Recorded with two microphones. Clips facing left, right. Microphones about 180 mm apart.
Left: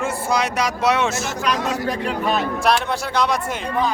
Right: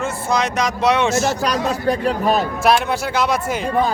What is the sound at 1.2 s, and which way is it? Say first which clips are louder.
Speech: right 4 dB; 35° right (ahead or behind).